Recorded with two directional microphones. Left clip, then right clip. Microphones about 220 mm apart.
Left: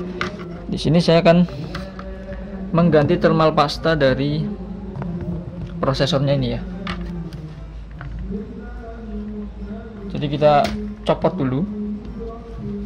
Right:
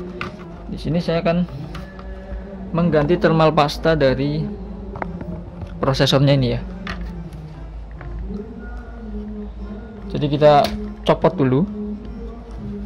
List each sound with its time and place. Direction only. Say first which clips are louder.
0.7 s a man's voice: left 6 dB; 20° left (ahead or behind)
3.1 s speech: even; 15° right (ahead or behind)
5.8 s a man's voice: right 2 dB; 20° right (ahead or behind)
6.1 s a man's voice: right 3 dB; 45° right (ahead or behind)
10.0 s a man's voice: right 2 dB; 40° right (ahead or behind)